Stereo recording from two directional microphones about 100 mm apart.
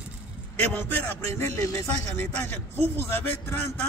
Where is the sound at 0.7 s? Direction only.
20° left (ahead or behind).